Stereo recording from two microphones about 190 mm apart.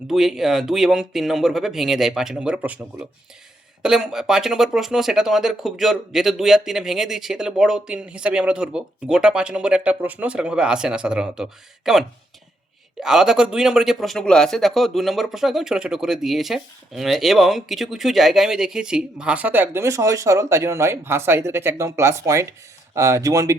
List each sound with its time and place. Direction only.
0.1 s a man's voice: centre (ahead or behind); by 23.6 s 15° right (ahead or behind)